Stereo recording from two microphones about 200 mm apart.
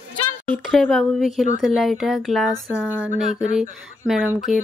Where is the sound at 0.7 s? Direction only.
Centre (ahead or behind).